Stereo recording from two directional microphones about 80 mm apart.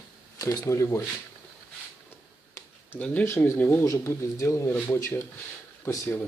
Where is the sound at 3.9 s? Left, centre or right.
Left.